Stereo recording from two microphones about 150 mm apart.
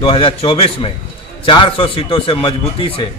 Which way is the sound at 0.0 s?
35° left (ahead or behind).